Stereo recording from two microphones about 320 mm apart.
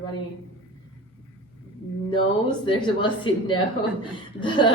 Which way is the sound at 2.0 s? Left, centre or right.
Centre.